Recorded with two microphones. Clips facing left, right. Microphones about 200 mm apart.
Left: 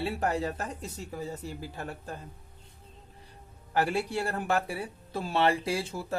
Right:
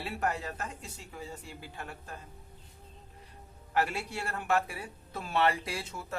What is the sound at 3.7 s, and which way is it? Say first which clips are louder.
Speech: left 4 dB; 35° left (ahead or behind).